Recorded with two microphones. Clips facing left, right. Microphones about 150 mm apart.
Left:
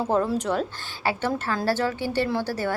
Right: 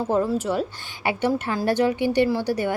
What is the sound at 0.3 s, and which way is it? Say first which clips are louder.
A woman's voice: right 1 dB; 5° right (ahead or behind).